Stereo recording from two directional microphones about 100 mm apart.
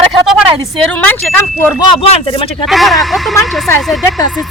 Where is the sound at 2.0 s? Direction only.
75° left (ahead or behind).